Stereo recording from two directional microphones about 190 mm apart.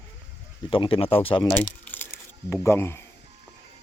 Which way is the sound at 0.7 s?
30° left (ahead or behind).